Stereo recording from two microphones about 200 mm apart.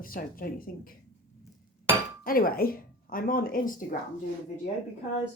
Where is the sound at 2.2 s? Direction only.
45° left (ahead or behind).